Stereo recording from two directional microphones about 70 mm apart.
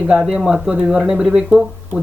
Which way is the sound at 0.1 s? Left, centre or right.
Centre.